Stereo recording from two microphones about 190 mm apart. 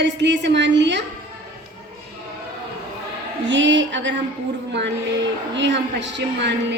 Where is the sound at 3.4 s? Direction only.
75° right (ahead or behind).